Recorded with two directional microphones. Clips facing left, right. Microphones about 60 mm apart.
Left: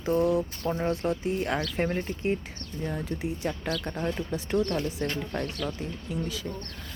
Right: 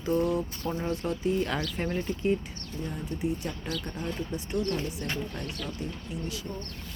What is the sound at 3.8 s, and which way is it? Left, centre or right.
Speech, left.